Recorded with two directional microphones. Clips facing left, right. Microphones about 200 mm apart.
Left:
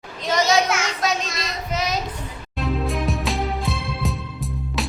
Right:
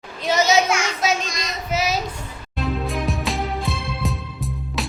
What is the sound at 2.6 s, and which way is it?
Music, centre (ahead or behind).